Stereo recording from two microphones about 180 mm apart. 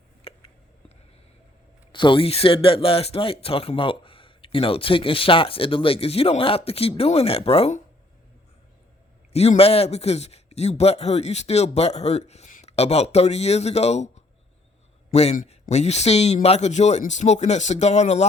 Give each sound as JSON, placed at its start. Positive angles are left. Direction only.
{"t": 0.2, "sound": "a sound", "side_deg": 35}
{"t": 1.9, "sound": "speech", "side_deg": 25}
{"t": 9.3, "sound": "speech", "side_deg": 35}